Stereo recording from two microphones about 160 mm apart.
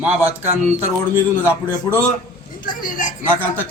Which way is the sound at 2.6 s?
55° left (ahead or behind).